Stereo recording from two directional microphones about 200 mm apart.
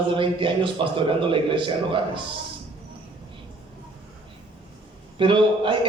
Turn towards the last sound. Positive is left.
turn(degrees=-25)  # may be behind; listen again after turning